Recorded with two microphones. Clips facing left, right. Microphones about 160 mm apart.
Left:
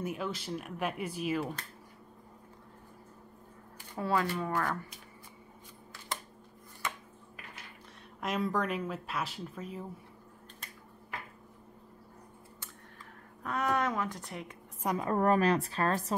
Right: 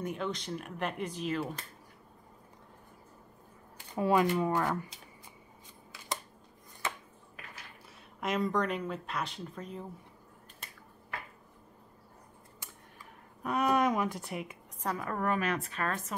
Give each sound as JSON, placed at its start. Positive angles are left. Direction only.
{"t": 0.0, "sound": "speech", "side_deg": 5}
{"t": 3.9, "sound": "speech", "side_deg": -15}
{"t": 8.2, "sound": "speech", "side_deg": 0}
{"t": 13.4, "sound": "speech", "side_deg": -15}
{"t": 15.0, "sound": "a woman's voice", "side_deg": 30}